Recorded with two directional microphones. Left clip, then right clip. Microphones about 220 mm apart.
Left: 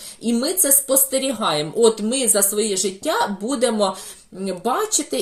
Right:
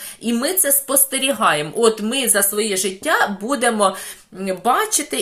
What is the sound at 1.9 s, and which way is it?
Speech, 25° right (ahead or behind).